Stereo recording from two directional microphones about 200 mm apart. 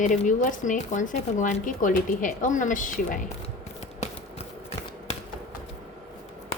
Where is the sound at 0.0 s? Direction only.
40° left (ahead or behind).